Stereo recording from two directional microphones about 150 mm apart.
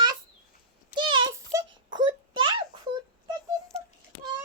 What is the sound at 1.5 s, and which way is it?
Wail, 20° right (ahead or behind).